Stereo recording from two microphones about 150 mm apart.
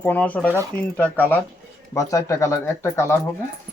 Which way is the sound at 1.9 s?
20° left (ahead or behind).